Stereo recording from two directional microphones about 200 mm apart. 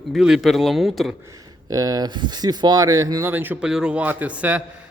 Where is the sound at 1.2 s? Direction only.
15° right (ahead or behind).